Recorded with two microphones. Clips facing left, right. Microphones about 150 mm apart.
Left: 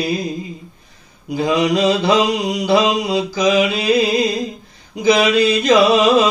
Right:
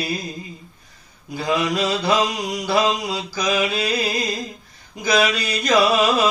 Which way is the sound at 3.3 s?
20° left (ahead or behind).